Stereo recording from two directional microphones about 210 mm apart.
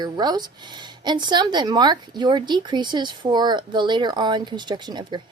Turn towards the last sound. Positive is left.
turn(degrees=-20)  # may be behind; listen again after turning